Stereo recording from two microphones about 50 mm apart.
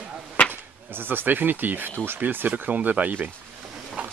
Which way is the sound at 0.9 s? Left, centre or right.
Right.